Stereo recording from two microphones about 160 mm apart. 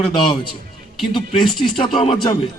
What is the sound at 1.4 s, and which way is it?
Speech, centre (ahead or behind).